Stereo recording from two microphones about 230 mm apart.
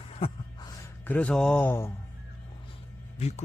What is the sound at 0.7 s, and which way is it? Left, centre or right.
Speech, centre.